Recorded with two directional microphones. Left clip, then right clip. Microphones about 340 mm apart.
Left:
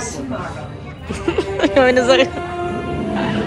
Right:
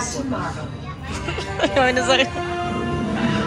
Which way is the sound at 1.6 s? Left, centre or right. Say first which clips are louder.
Left 4 dB; centre.